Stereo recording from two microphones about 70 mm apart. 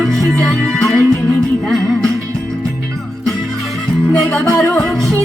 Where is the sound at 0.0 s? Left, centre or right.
Centre.